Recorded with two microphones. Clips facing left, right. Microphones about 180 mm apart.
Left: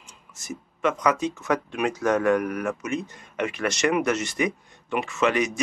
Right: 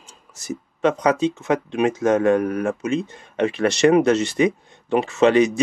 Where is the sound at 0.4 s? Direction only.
30° right (ahead or behind).